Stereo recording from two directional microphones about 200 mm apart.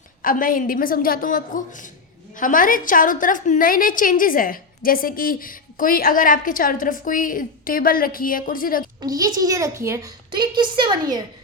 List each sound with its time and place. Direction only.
0.2 s a woman's voice: 45° left (ahead or behind)
9.0 s a child's voice: 20° right (ahead or behind)